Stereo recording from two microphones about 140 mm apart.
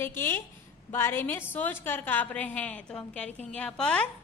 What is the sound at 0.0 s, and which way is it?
A woman's voice, 15° left (ahead or behind).